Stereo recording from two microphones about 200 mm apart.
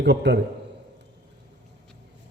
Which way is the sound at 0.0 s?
60° right (ahead or behind).